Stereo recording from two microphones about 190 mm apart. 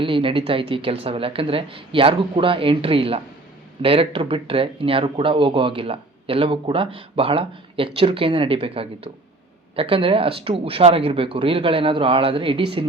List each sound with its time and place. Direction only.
0.0 s speech: 25° right (ahead or behind)